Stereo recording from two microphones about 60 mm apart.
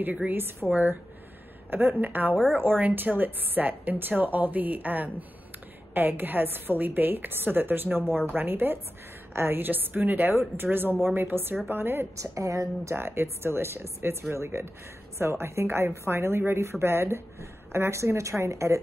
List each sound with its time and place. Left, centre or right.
0.3 s a woman's voice: right
1.7 s a woman's voice: right
8.0 s speech: centre
8.3 s a woman's voice: right
12.2 s a woman's voice: right
12.9 s a woman's voice: right